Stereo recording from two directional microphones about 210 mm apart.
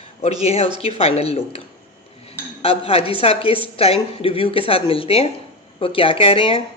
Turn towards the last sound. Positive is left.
turn(degrees=25)  # may be behind; listen again after turning